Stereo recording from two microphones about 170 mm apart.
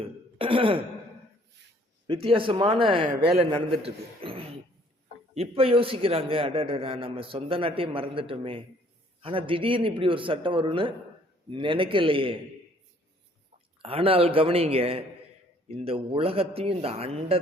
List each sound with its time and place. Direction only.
0.3 s throat clearing: 30° right (ahead or behind)
2.0 s a man's voice: 30° right (ahead or behind)
13.8 s a man's voice: 35° right (ahead or behind)